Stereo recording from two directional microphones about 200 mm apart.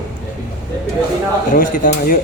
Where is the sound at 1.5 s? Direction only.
45° left (ahead or behind).